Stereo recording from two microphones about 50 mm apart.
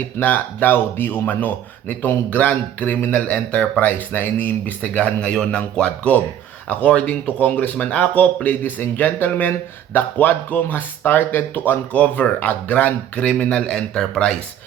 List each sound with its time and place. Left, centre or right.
0.2 s speech: left
3.2 s speech: left
4.1 s speech: left
8.1 s speech: left
11.9 s speech: left; by 14.3 s centre